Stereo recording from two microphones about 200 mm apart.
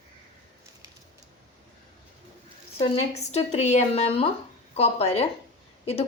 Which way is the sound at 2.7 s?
25° left (ahead or behind).